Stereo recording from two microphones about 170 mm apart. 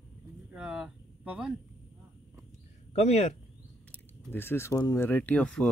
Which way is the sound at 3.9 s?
15° left (ahead or behind).